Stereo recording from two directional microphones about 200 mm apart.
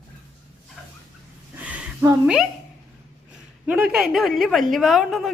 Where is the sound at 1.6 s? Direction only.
10° right (ahead or behind).